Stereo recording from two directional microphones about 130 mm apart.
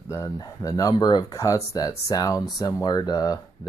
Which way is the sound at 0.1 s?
25° left (ahead or behind).